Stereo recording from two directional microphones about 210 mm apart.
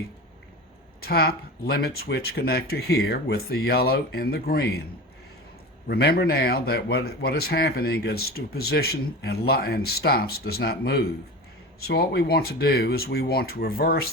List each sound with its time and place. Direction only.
1.0 s a man's voice: 45° left (ahead or behind)
5.9 s a man's voice: 50° left (ahead or behind)